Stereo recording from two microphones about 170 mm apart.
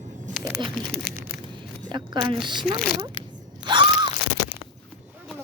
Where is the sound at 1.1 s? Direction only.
65° left (ahead or behind).